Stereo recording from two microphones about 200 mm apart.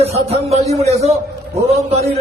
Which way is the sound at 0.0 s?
30° right (ahead or behind).